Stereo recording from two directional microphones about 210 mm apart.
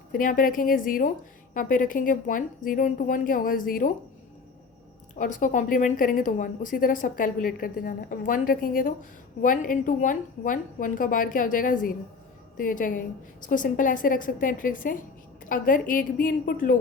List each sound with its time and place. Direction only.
0.2 s a woman's voice: 40° left (ahead or behind)
5.1 s a woman's voice: 40° left (ahead or behind)